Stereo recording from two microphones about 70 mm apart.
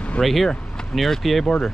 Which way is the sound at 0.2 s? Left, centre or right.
Centre.